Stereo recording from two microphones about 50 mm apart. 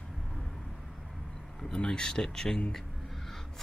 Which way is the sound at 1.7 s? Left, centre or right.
Centre.